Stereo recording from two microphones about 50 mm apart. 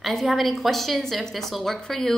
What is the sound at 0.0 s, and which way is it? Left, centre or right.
A woman's voice, centre.